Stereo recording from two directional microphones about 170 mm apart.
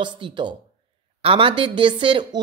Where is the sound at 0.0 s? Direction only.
30° right (ahead or behind).